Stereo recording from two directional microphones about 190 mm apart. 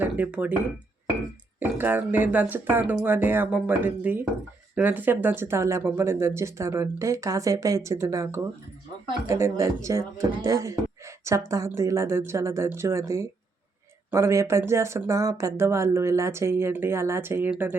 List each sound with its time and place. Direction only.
0.0 s speech: 10° right (ahead or behind)
1.5 s speech: 10° right (ahead or behind)